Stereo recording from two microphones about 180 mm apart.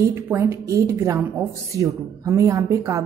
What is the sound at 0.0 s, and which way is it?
A woman's voice, 15° right (ahead or behind).